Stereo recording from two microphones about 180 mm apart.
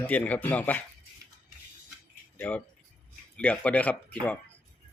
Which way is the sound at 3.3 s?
5° left (ahead or behind).